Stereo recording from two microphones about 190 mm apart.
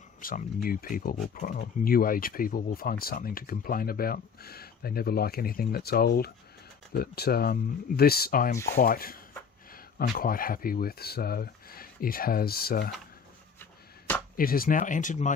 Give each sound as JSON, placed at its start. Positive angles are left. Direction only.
{"t": 0.2, "sound": "speech", "side_deg": 50}
{"t": 14.3, "sound": "speech", "side_deg": 50}